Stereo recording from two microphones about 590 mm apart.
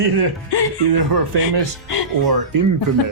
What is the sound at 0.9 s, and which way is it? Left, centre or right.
Speech, right.